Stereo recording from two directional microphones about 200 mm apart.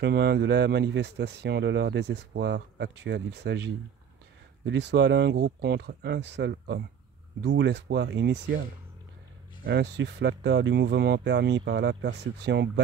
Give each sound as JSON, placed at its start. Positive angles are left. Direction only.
{"t": 0.0, "sound": "speech", "side_deg": -55}
{"t": 9.7, "sound": "speech", "side_deg": -60}